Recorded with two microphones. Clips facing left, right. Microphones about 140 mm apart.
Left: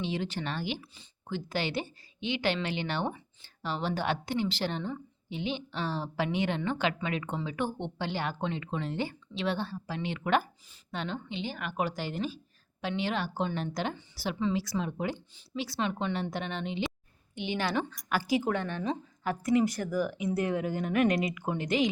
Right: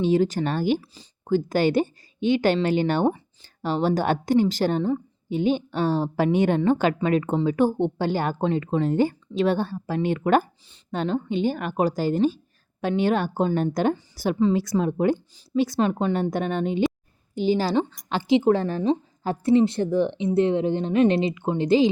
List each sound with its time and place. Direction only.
0.0 s speech: 40° right (ahead or behind)
17.3 s a woman's voice: 35° right (ahead or behind)